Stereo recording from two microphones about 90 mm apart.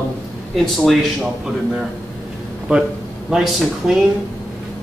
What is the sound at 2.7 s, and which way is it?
Speech, 10° right (ahead or behind).